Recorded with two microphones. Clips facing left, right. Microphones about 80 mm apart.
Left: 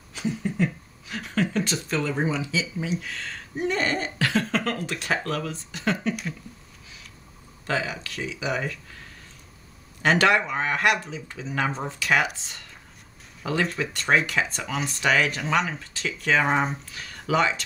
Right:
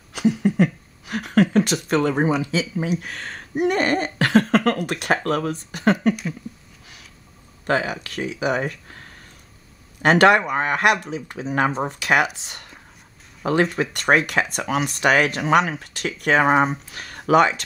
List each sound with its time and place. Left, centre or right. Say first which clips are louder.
0.1 s a sound: right 9 dB; right
1.0 s a sound: right 8 dB; right
1.9 s speech: right 6 dB; right
3.5 s cough: right 6 dB; right
4.8 s speech: right 6 dB; right
7.6 s speech: right 6 dB; right
10.0 s speech: right 6 dB; right
13.4 s speech: right 6 dB; right